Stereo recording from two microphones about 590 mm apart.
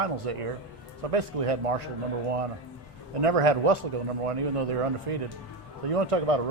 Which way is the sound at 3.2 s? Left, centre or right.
Right.